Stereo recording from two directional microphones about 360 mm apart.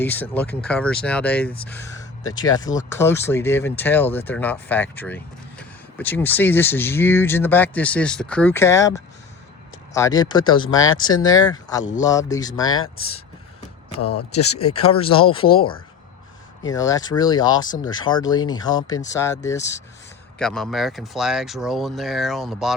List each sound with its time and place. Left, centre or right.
0.0 s speech: centre
10.8 s speech: left
11.1 s speech: centre
14.6 s speech: centre
16.6 s speech: centre